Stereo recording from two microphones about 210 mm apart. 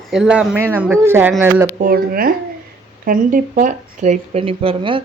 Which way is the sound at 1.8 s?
45° right (ahead or behind).